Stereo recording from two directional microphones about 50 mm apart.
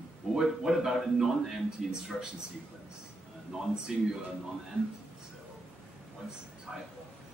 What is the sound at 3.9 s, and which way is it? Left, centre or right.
Speech, centre.